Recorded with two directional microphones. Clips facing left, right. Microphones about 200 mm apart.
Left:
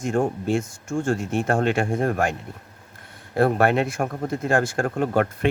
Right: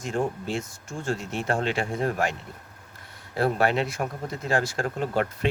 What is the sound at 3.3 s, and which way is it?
Speech, 55° left (ahead or behind).